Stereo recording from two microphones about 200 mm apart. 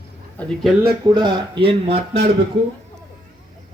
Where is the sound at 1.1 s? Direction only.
20° right (ahead or behind).